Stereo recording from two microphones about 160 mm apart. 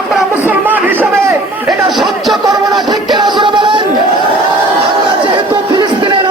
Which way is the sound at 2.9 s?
25° right (ahead or behind).